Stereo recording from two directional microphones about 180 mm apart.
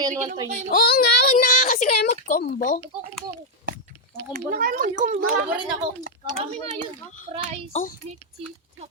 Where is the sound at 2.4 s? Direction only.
50° left (ahead or behind).